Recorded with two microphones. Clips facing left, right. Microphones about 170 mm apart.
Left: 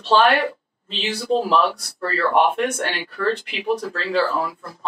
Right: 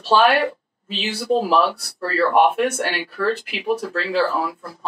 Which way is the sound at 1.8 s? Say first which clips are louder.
Right 3 dB; 5° right (ahead or behind).